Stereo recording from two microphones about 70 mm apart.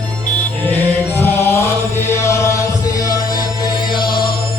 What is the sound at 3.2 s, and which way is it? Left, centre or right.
Music, left.